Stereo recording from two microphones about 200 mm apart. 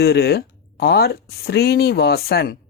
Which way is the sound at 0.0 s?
55° left (ahead or behind).